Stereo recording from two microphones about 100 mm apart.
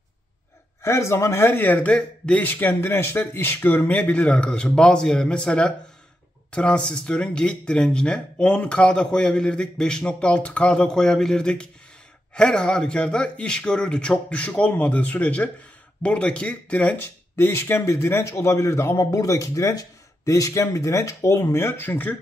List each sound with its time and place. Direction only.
0.8 s speech: 30° left (ahead or behind)